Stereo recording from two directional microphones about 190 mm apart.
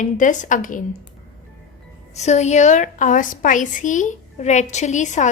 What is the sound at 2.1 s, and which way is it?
A woman's voice, 35° left (ahead or behind).